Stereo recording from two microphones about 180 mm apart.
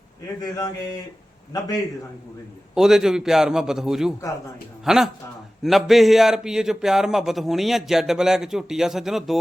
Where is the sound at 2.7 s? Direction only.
5° right (ahead or behind).